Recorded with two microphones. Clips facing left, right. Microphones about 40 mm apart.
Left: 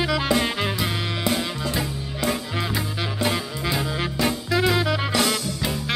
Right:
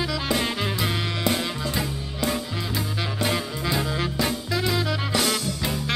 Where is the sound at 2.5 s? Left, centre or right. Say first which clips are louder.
Left 3 dB; centre.